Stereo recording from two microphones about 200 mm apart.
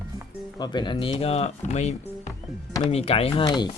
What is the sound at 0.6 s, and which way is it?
Speech, 20° left (ahead or behind).